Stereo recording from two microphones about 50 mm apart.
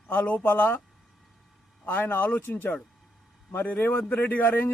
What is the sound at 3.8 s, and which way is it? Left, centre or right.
Speech, left.